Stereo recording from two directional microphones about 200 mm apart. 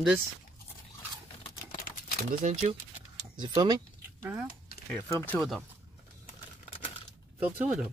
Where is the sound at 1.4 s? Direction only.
30° left (ahead or behind).